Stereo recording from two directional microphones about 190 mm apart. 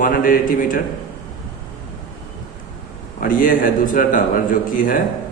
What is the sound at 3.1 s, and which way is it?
A man's voice, 45° left (ahead or behind).